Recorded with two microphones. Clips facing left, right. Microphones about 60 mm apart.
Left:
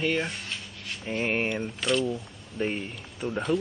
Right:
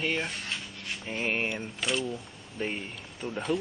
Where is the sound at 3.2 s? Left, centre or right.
Left.